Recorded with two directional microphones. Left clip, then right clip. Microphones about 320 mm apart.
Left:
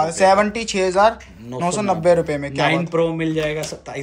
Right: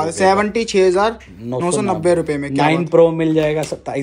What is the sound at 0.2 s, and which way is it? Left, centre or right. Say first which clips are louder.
Speech: right 1 dB; centre.